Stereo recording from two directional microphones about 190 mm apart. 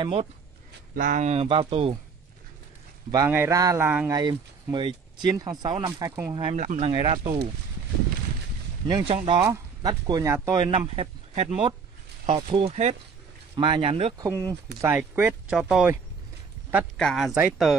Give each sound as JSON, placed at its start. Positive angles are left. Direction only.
{"t": 0.0, "sound": "speech", "side_deg": -30}
{"t": 0.9, "sound": "speech", "side_deg": -40}
{"t": 3.1, "sound": "speech", "side_deg": -15}
{"t": 6.3, "sound": "speech", "side_deg": -25}
{"t": 6.6, "sound": "speech", "side_deg": -40}
{"t": 6.9, "sound": "speech", "side_deg": -25}
{"t": 8.8, "sound": "speech", "side_deg": -25}
{"t": 9.4, "sound": "speech", "side_deg": -20}
{"t": 10.9, "sound": "speech", "side_deg": -35}
{"t": 14.1, "sound": "speech", "side_deg": -15}
{"t": 16.9, "sound": "speech", "side_deg": 0}